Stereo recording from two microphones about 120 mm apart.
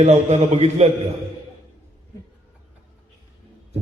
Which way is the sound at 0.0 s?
70° right (ahead or behind).